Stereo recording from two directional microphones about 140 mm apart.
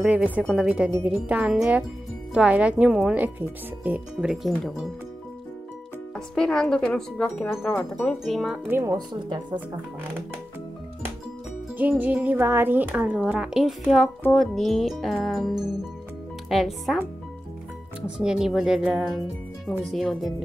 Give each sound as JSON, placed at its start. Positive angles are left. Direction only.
{"t": 0.0, "sound": "speech", "side_deg": -10}
{"t": 6.1, "sound": "speech", "side_deg": 5}
{"t": 8.6, "sound": "speech", "side_deg": -15}
{"t": 8.9, "sound": "speech", "side_deg": -30}
{"t": 11.8, "sound": "speech", "side_deg": -10}
{"t": 18.0, "sound": "speech", "side_deg": -5}